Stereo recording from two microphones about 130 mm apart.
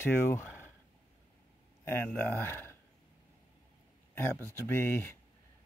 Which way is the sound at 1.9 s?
15° left (ahead or behind).